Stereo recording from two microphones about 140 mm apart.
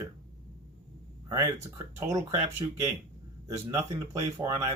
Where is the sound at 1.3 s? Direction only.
20° right (ahead or behind).